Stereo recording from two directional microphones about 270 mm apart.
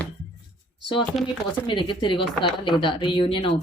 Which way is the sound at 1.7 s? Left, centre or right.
Centre.